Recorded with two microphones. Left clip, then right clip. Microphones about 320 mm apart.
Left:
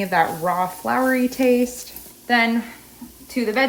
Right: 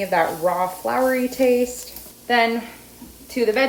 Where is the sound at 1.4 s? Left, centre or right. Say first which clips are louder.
Right 1 dB; left.